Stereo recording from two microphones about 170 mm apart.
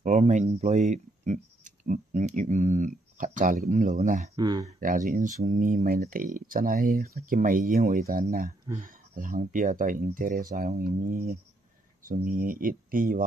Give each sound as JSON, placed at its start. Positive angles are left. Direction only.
{"t": 0.0, "sound": "speech", "side_deg": -45}
{"t": 4.4, "sound": "speech", "side_deg": -25}
{"t": 4.7, "sound": "speech", "side_deg": -50}